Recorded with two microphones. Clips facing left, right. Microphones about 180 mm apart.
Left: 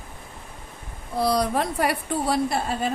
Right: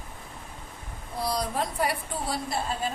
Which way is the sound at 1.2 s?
70° left (ahead or behind).